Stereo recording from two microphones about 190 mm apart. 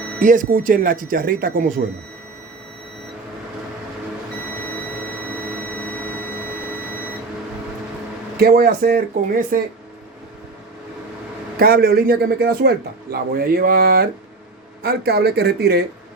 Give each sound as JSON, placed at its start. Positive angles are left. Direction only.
{"t": 0.2, "sound": "speech", "side_deg": -45}
{"t": 5.5, "sound": "a sound", "side_deg": 10}
{"t": 8.4, "sound": "speech", "side_deg": -55}
{"t": 11.6, "sound": "speech", "side_deg": -50}